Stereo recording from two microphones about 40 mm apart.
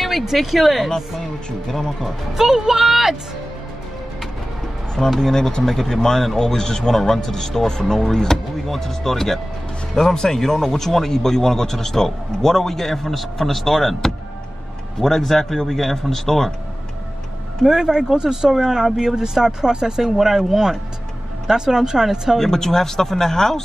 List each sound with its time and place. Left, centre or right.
0.0 s speech: centre
2.3 s speech: centre
4.9 s speech: centre
17.6 s speech: centre
22.4 s speech: centre